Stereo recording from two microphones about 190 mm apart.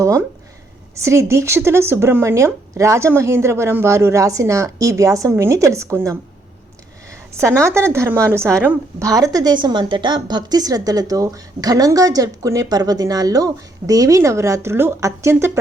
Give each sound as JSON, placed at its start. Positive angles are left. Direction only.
{"t": 0.0, "sound": "speech", "side_deg": -15}
{"t": 7.3, "sound": "a woman's voice", "side_deg": -15}